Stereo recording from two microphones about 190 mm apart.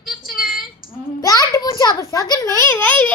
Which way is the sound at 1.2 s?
15° left (ahead or behind).